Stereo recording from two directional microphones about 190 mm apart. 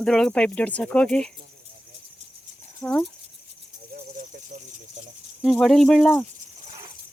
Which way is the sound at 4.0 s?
55° right (ahead or behind).